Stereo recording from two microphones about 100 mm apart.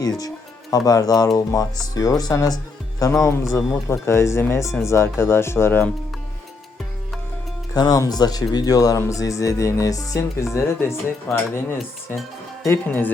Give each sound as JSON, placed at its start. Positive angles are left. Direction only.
{"t": 0.0, "sound": "speech", "side_deg": 40}
{"t": 7.7, "sound": "speech", "side_deg": 35}
{"t": 12.6, "sound": "speech", "side_deg": 20}